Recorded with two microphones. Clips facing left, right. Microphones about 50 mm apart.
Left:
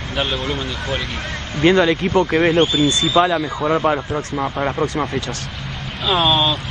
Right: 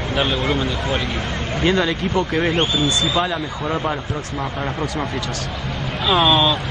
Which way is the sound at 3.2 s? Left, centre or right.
Centre.